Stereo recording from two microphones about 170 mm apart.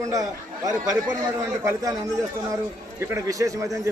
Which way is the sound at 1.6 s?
15° right (ahead or behind).